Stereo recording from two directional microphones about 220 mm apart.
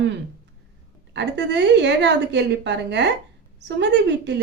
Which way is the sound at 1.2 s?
50° right (ahead or behind).